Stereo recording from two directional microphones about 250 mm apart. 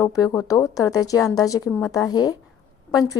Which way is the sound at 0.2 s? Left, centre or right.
Centre.